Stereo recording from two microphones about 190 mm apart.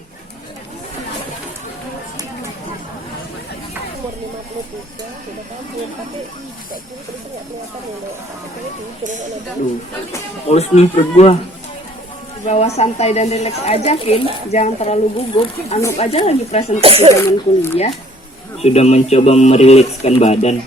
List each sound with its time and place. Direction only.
10.5 s speech: 35° left (ahead or behind)
12.5 s speech: 35° left (ahead or behind)
16.8 s speech: 30° right (ahead or behind)
17.2 s speech: 15° left (ahead or behind)
18.6 s speech: 35° left (ahead or behind)